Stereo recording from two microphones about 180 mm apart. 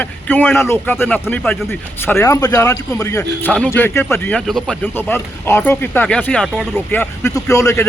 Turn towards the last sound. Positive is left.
turn(degrees=15)  # may be behind; listen again after turning